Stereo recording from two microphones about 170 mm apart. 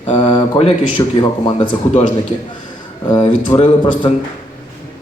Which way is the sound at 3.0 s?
25° left (ahead or behind).